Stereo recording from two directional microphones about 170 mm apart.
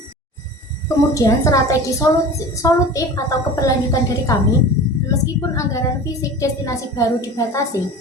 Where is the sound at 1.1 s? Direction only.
20° left (ahead or behind).